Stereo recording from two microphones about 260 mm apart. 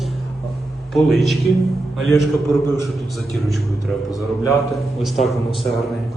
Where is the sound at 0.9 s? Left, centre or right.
Centre.